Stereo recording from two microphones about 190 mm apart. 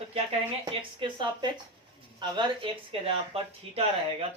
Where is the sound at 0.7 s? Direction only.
25° right (ahead or behind).